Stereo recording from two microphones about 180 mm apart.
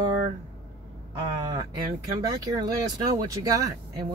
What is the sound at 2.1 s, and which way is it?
Speech, 20° right (ahead or behind).